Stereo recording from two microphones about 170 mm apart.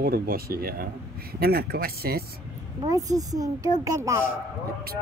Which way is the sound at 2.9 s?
20° right (ahead or behind).